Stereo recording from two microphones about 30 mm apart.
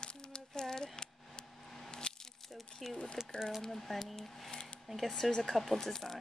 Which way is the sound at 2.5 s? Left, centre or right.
Centre.